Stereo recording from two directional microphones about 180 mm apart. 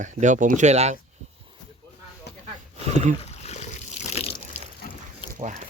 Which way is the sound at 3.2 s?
35° left (ahead or behind).